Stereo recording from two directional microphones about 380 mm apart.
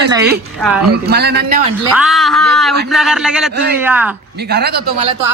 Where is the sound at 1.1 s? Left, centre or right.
Right.